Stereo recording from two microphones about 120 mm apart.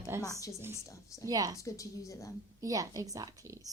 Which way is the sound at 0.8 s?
25° left (ahead or behind).